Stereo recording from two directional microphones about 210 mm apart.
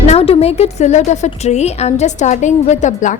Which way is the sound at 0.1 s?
30° left (ahead or behind).